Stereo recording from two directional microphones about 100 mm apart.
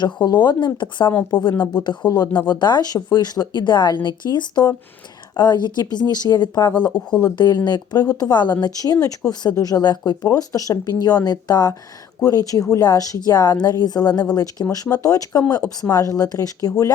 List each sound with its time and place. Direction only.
0.0 s a woman's voice: 45° left (ahead or behind)